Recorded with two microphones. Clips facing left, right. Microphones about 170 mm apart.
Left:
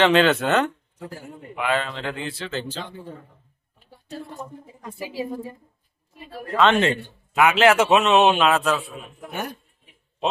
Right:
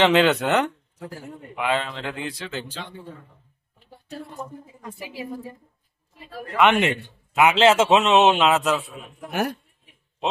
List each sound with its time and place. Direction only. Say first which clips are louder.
0.0 s speech: even; 15° right (ahead or behind)
5.0 s a woman's voice: left 5 dB; 30° left (ahead or behind)
6.6 s a man's voice: even; 15° right (ahead or behind)